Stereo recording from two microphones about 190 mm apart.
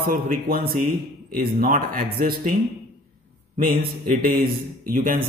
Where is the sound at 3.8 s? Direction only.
50° right (ahead or behind).